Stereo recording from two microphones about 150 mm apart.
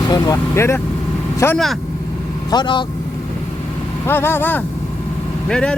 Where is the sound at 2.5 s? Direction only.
30° left (ahead or behind).